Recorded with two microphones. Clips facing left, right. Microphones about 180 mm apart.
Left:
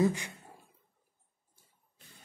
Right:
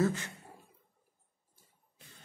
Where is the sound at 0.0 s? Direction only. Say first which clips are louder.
Left 2 dB; 15° left (ahead or behind).